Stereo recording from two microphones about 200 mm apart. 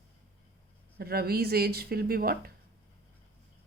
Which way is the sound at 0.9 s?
50° right (ahead or behind).